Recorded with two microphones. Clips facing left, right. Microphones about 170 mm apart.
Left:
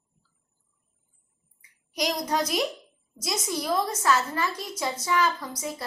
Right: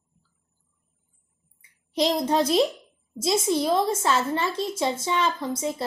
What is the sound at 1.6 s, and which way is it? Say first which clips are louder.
A child's voice: right 6 dB; 25° right (ahead or behind).